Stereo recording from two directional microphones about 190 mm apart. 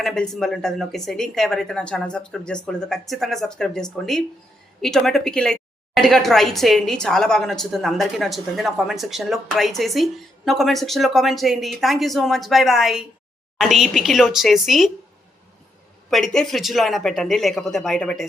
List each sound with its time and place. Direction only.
0.0 s a woman's voice: 5° left (ahead or behind)
16.0 s a woman's voice: centre (ahead or behind)